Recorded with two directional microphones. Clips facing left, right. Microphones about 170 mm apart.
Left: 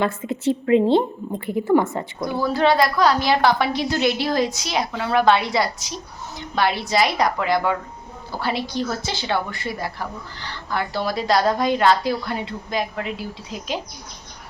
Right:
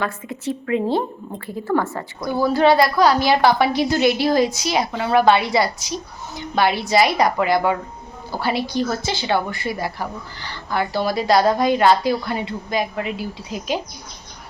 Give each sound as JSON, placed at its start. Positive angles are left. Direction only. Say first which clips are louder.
{"t": 0.0, "sound": "a woman's voice", "louder": "left 4 dB", "side_deg": 25}
{"t": 2.4, "sound": "speech", "louder": "right 3 dB", "side_deg": -5}